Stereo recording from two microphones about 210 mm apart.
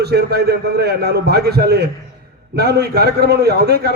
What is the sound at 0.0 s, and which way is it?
A man's voice, 50° right (ahead or behind).